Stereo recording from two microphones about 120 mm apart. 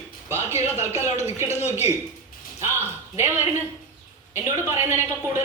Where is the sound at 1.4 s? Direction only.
70° left (ahead or behind).